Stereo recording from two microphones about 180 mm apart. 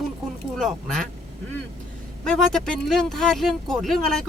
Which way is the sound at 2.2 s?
Centre (ahead or behind).